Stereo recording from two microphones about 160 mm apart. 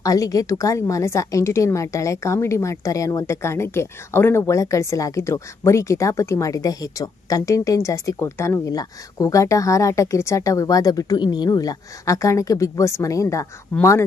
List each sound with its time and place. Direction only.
0.0 s a woman's voice: 20° left (ahead or behind)